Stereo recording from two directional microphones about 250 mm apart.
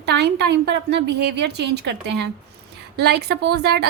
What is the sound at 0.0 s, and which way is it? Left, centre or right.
A woman's voice, right.